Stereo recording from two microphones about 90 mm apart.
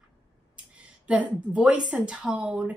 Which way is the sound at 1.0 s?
15° right (ahead or behind).